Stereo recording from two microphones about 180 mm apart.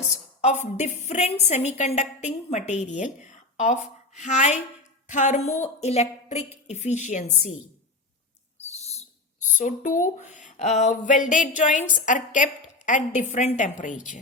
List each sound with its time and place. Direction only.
0.4 s a woman's voice: 40° left (ahead or behind)
8.7 s speech: 35° left (ahead or behind)